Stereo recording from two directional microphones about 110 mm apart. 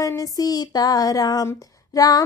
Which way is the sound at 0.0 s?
30° left (ahead or behind).